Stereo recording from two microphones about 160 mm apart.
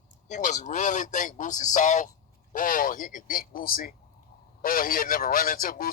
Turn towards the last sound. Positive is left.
turn(degrees=65)  # may be behind; listen again after turning